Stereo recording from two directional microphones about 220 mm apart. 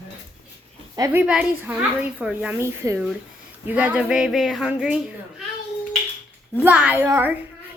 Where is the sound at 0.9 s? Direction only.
10° right (ahead or behind).